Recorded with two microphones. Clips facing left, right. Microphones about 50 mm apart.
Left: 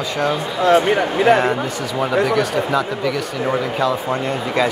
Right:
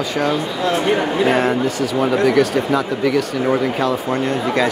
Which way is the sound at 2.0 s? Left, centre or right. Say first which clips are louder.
Right 2 dB; centre.